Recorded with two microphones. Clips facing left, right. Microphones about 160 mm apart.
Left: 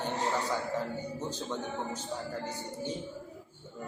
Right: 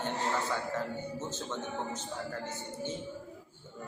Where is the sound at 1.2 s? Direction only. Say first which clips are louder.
Left 2 dB; 15° left (ahead or behind).